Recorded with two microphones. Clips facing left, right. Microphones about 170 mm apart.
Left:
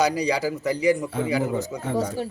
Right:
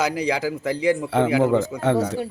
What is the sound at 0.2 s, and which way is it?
A man's voice, 90° right.